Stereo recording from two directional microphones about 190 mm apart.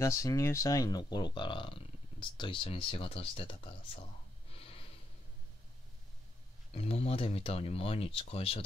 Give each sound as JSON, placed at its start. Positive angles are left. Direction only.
{"t": 0.0, "sound": "speech", "side_deg": 15}
{"t": 4.5, "sound": "wheeze", "side_deg": 30}
{"t": 6.7, "sound": "speech", "side_deg": 30}